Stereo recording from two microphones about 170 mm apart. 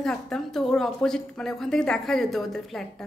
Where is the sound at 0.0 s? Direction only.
5° left (ahead or behind).